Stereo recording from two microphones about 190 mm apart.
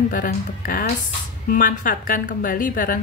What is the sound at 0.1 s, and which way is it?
A woman's voice, 45° left (ahead or behind).